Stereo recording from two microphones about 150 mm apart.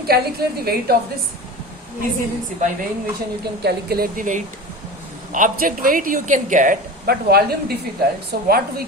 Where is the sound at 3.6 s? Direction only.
90° right.